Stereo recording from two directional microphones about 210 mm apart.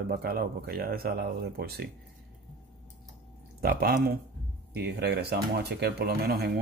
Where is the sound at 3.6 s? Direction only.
45° right (ahead or behind).